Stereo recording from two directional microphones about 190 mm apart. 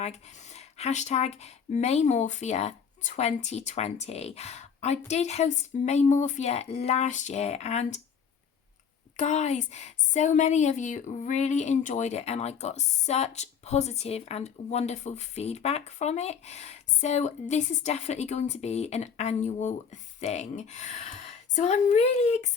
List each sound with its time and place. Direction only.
0.0 s a woman's voice: 35° left (ahead or behind)
9.1 s a woman's voice: 35° left (ahead or behind)